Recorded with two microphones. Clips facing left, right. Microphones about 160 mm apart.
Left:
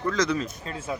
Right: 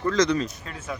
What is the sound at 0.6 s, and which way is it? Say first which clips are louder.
Speech: left 2 dB; 30° left (ahead or behind).